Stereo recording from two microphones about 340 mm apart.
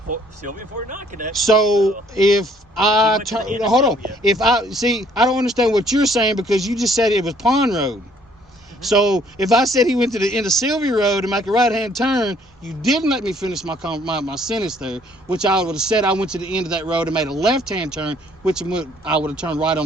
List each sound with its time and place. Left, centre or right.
0.1 s speech: right
1.4 s speech: centre